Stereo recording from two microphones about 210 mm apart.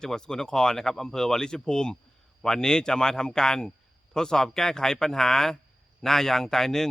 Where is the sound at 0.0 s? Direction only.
5° left (ahead or behind).